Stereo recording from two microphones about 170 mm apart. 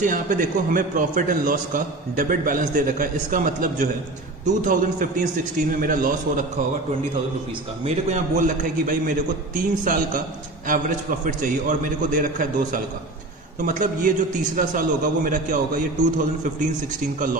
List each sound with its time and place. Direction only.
0.0 s a man's voice: 50° right (ahead or behind)
7.8 s a man's voice: 45° right (ahead or behind)
10.7 s a man's voice: 55° right (ahead or behind)